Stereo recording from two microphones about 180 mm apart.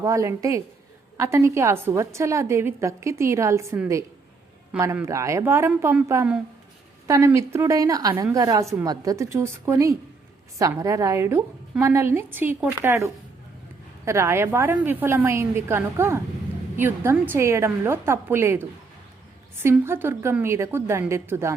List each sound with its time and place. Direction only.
0.0 s a woman's voice: 20° right (ahead or behind)
4.8 s a woman's voice: 15° right (ahead or behind)